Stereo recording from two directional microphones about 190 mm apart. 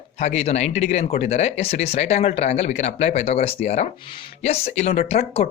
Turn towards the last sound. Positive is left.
turn(degrees=35)  # may be behind; listen again after turning